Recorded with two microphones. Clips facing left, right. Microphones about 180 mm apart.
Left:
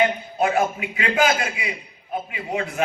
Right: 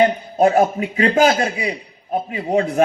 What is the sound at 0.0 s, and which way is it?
A man's voice, 45° right (ahead or behind).